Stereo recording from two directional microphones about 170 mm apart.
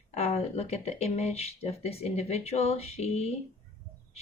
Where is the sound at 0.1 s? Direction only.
35° left (ahead or behind).